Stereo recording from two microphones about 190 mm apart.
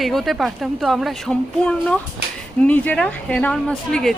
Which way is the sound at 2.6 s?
10° left (ahead or behind).